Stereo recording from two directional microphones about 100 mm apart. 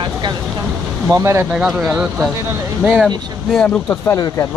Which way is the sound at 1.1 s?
30° right (ahead or behind).